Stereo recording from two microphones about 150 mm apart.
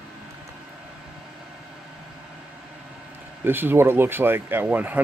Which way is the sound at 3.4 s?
15° right (ahead or behind).